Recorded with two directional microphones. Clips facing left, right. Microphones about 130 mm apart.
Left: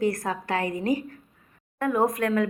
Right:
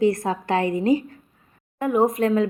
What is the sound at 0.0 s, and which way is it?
A woman's voice, 25° right (ahead or behind).